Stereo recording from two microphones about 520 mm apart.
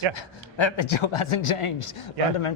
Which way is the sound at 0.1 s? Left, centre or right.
Left.